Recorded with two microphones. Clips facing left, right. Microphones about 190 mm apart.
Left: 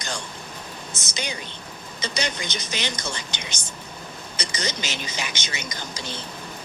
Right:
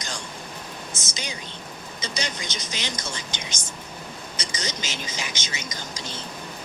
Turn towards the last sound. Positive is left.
turn(degrees=60)  # may be behind; listen again after turning